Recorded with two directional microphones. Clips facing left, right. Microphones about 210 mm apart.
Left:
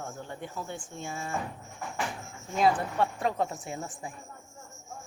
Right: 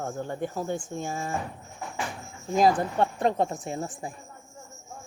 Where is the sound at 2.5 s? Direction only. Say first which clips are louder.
Right 4 dB; 40° right (ahead or behind).